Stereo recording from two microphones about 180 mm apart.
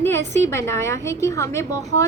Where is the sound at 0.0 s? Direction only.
15° left (ahead or behind).